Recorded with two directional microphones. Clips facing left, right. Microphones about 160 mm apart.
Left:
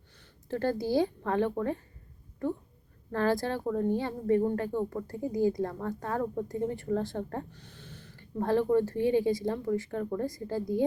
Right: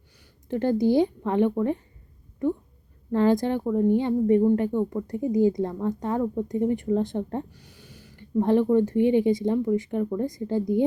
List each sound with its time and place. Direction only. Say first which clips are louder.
0.4 s speech: right 7 dB; 20° right (ahead or behind)